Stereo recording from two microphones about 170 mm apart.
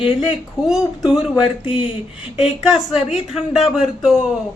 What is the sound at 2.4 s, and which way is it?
Speech, centre (ahead or behind).